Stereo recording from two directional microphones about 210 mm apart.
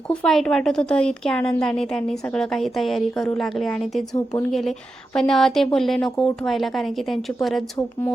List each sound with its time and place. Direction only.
0.1 s a woman's voice: 5° left (ahead or behind)
4.1 s speech: 15° left (ahead or behind)
5.1 s a woman's voice: centre (ahead or behind)